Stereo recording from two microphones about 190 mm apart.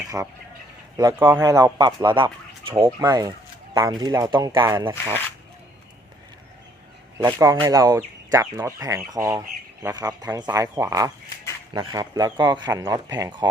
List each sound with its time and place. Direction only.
0.1 s speech: 10° right (ahead or behind)
7.3 s speech: 15° right (ahead or behind)